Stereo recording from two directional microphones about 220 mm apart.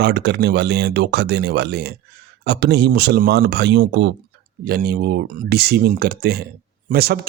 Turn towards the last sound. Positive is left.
turn(degrees=-45)  # may be behind; listen again after turning